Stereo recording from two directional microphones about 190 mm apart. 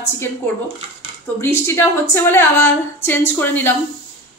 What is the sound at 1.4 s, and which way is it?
A woman's voice, 15° left (ahead or behind).